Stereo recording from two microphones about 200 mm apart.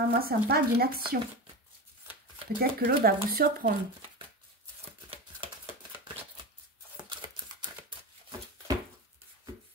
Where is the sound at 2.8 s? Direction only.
50° right (ahead or behind).